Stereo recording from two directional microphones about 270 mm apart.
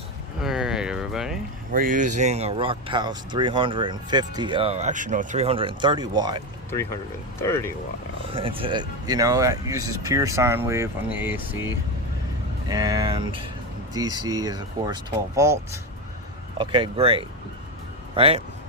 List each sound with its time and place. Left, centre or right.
0.4 s a sound: centre
1.7 s speech: right
7.3 s speech: centre
8.3 s speech: centre
16.6 s speech: centre